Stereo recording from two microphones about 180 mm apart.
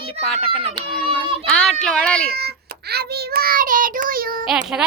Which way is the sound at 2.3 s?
60° right (ahead or behind).